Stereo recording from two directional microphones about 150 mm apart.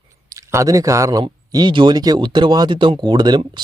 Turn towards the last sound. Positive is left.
turn(degrees=-30)  # may be behind; listen again after turning